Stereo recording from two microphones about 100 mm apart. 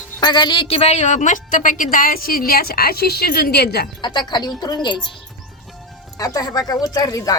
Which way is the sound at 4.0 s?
50° left (ahead or behind).